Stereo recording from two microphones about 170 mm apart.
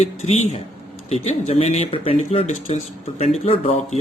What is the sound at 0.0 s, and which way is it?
Speech, 40° left (ahead or behind).